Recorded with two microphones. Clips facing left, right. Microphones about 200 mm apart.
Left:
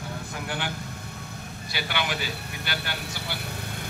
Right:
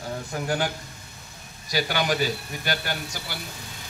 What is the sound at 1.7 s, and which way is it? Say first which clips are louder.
A man's voice: right 6 dB; 40° right (ahead or behind).